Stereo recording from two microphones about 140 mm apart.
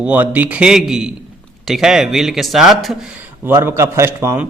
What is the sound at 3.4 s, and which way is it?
Speech, 15° right (ahead or behind).